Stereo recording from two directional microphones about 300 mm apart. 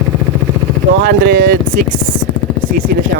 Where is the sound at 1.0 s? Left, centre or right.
Right.